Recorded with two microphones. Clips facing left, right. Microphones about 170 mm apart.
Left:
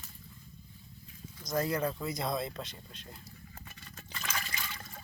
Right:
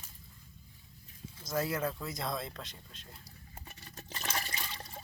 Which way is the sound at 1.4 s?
5° right (ahead or behind).